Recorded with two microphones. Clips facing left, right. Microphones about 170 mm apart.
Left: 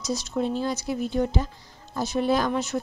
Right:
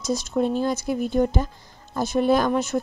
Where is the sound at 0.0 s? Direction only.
50° right (ahead or behind).